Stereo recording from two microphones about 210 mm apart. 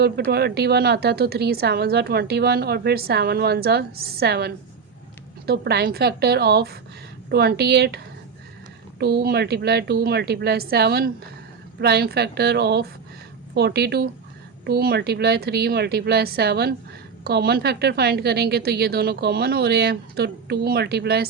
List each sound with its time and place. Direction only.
0.3 s a woman's voice: 50° right (ahead or behind)